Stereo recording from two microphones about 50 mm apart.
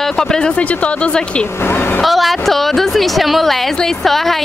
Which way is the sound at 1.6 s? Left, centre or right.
Left.